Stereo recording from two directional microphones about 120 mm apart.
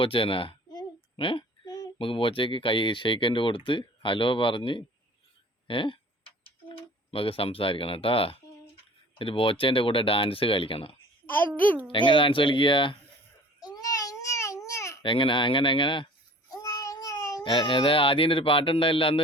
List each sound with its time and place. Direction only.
0.0 s speech: 45° left (ahead or behind)
0.7 s child singing: 40° left (ahead or behind)
2.0 s speech: 45° left (ahead or behind)
5.6 s typing: 45° left (ahead or behind)
9.1 s speech: 50° left (ahead or behind)
11.3 s a child's voice: 15° left (ahead or behind)
11.9 s speech: 40° left (ahead or behind)
13.6 s babbling: 30° left (ahead or behind)
15.0 s speech: 45° left (ahead or behind)
16.6 s speech: 30° left (ahead or behind); by 19.2 s 45° left (ahead or behind)